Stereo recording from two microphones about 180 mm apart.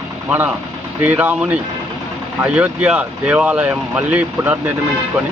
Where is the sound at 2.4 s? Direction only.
5° right (ahead or behind).